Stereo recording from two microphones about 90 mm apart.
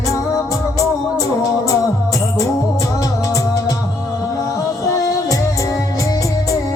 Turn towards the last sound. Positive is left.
turn(degrees=40)  # may be behind; listen again after turning